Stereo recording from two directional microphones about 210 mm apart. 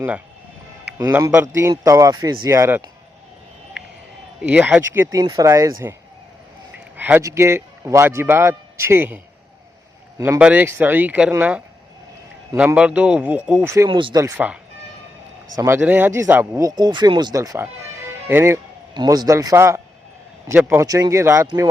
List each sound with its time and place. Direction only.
0.9 s speech: 15° right (ahead or behind)
4.4 s speech: 5° right (ahead or behind)
6.9 s a man's voice: 10° right (ahead or behind)